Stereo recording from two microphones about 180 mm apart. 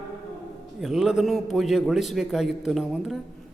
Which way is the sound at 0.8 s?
5° right (ahead or behind).